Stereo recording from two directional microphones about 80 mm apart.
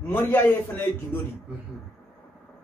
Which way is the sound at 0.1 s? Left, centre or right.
Left.